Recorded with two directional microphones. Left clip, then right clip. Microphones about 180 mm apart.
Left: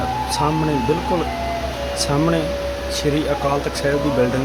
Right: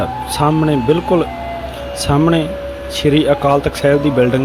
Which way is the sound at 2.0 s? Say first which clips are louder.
Right 6 dB; 30° right (ahead or behind).